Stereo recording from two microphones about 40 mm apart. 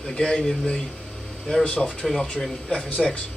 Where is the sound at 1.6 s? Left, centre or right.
Left.